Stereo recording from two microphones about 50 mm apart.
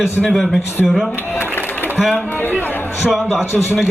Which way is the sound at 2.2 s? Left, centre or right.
Left.